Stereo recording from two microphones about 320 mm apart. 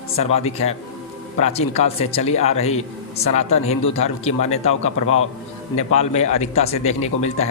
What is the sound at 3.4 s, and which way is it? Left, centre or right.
Speech, centre.